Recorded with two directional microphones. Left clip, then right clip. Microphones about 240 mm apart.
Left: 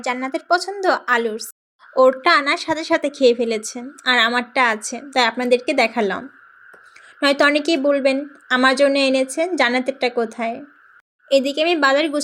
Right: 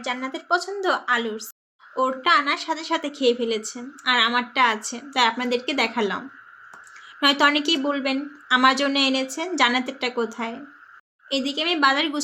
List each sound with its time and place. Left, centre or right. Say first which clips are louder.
0.0 s a woman's voice: left 5 dB; left